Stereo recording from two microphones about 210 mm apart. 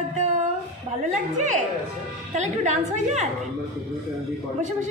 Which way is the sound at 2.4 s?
35° right (ahead or behind).